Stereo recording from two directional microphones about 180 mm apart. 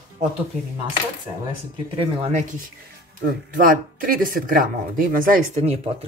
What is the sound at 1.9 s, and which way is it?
Speech, 30° right (ahead or behind).